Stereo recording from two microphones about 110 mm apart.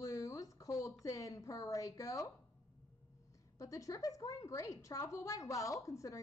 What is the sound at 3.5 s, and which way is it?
A woman's voice, 30° left (ahead or behind).